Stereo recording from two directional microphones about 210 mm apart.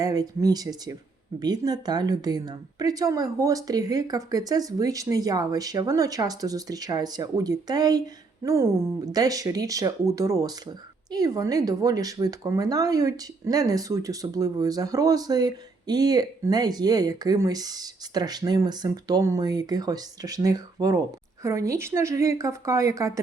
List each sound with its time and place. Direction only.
0.0 s speech: 15° right (ahead or behind)